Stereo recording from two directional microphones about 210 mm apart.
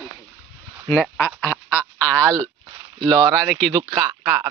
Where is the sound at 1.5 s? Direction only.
15° left (ahead or behind).